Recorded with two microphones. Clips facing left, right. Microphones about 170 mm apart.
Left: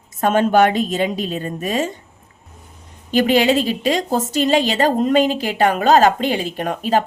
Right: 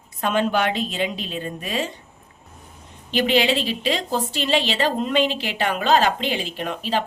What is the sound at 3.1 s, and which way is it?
A woman's voice, 45° left (ahead or behind).